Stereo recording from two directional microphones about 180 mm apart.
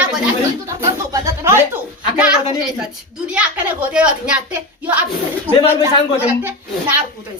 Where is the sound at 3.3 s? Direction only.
5° right (ahead or behind).